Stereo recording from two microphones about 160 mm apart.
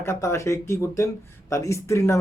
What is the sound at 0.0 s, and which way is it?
Speech, 15° left (ahead or behind).